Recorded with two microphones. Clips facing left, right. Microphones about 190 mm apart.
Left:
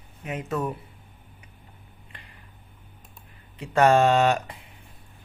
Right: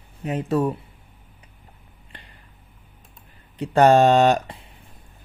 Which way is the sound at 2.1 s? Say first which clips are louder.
Right 4 dB; 35° right (ahead or behind).